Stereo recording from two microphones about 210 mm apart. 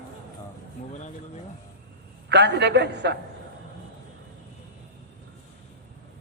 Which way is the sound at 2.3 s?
55° right (ahead or behind).